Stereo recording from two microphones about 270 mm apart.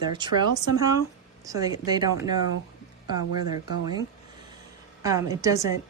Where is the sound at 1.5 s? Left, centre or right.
Centre.